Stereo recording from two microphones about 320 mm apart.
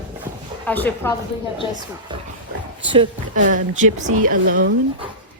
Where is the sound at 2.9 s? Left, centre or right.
Right.